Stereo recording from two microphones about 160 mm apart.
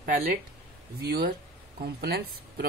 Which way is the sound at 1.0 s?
75° right (ahead or behind).